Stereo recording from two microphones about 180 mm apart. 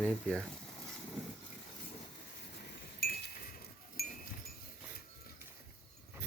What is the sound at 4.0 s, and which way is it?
Goat, 55° left (ahead or behind).